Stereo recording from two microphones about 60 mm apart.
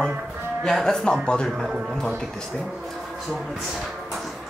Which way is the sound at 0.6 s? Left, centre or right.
Centre.